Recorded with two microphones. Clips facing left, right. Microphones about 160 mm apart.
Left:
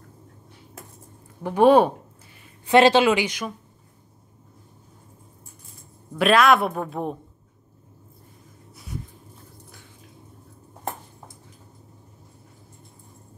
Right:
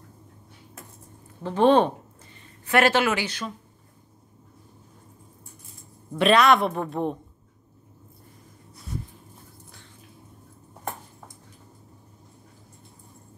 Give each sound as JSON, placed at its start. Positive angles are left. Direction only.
{"t": 1.4, "sound": "a woman's voice", "side_deg": 10}
{"t": 6.1, "sound": "speech", "side_deg": 0}
{"t": 8.7, "sound": "a sound", "side_deg": 0}